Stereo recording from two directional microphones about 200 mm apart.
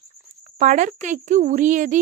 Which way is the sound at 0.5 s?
40° right (ahead or behind).